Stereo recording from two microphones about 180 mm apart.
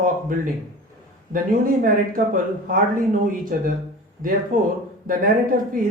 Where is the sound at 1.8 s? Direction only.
50° right (ahead or behind).